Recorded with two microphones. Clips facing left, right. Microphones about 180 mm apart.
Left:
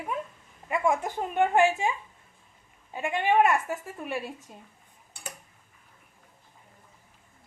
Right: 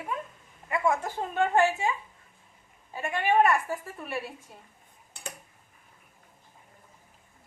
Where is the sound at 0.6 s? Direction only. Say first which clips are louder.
Left 1 dB; 20° left (ahead or behind).